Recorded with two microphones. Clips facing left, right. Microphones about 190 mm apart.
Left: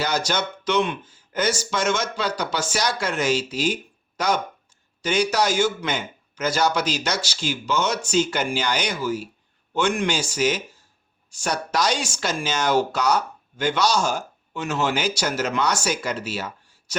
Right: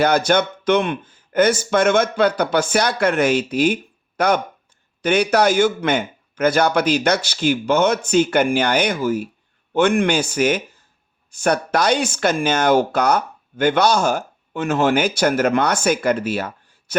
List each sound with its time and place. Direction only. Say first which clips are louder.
0.0 s speech: right 8 dB; 55° right (ahead or behind)